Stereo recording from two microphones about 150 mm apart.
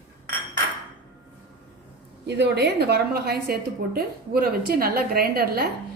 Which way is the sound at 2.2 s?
90° right.